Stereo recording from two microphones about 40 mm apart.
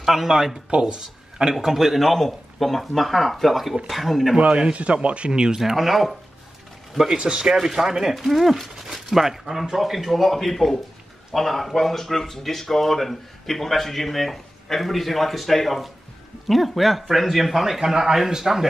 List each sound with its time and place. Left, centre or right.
0.0 s speech: centre
0.7 s speech: right
1.5 s speech: centre
4.4 s speech: right
5.6 s speech: centre
7.1 s speech: right
7.5 s speech: centre